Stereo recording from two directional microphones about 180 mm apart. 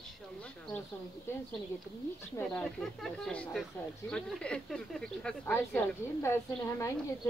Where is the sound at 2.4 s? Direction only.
5° left (ahead or behind).